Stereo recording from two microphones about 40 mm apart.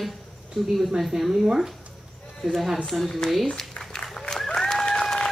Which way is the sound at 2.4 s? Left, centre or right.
Centre.